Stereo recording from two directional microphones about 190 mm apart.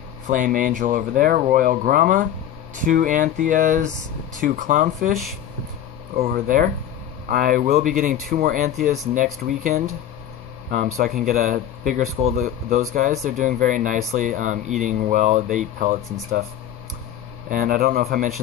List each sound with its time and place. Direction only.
0.3 s speech: 45° right (ahead or behind)
6.2 s speech: 45° right (ahead or behind)
11.2 s speech: 40° right (ahead or behind)
17.5 s speech: 45° right (ahead or behind)